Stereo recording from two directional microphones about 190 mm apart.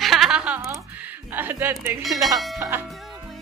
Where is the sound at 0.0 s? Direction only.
Centre (ahead or behind).